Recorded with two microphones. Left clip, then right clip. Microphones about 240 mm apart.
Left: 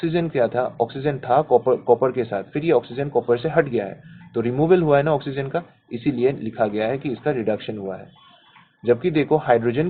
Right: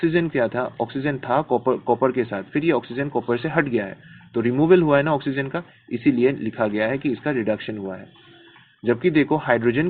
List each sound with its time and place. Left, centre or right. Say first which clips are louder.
0.0 s a man's voice: even; right